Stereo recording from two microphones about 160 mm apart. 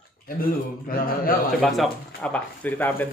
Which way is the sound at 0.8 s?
65° left (ahead or behind).